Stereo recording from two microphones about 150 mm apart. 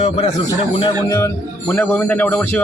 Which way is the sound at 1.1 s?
15° left (ahead or behind).